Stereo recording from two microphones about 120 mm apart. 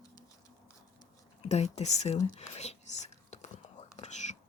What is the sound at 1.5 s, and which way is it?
Speech, 65° left (ahead or behind).